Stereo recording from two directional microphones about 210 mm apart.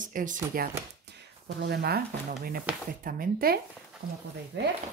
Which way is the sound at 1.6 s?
50° right (ahead or behind).